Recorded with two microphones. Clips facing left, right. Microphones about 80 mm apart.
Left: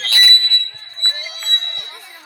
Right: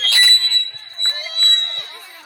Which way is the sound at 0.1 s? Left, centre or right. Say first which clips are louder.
Left 1 dB; right.